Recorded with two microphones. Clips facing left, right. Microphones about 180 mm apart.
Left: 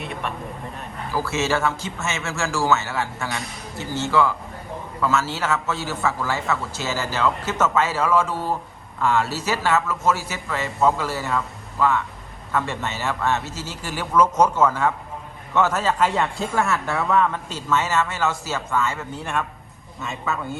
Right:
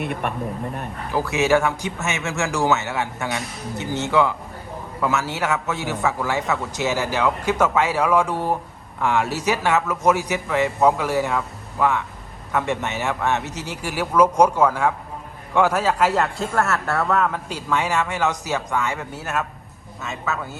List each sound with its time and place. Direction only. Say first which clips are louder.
0.0 s speech: right 4 dB; 55° right (ahead or behind)
1.1 s a man's voice: right 4 dB; 15° right (ahead or behind)
18.9 s a woman's voice: even; 5° right (ahead or behind)